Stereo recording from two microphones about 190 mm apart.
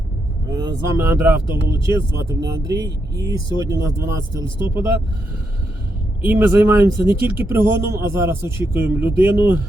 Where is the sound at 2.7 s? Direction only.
60° right (ahead or behind).